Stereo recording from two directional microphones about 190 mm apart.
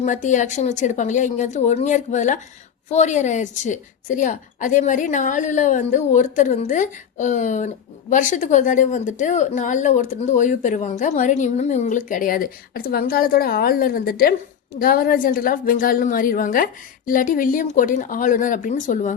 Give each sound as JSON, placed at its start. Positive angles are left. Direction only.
{"t": 0.0, "sound": "a woman's voice", "side_deg": 40}